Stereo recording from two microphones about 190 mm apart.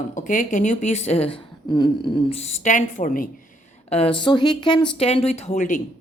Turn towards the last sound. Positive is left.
turn(degrees=40)  # may be behind; listen again after turning